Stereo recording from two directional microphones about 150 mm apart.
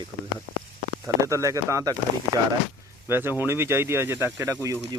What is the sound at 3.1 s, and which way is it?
Speech, 15° right (ahead or behind).